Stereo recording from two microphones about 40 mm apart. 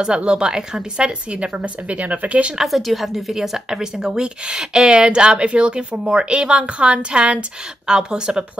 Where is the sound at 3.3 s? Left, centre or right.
Centre.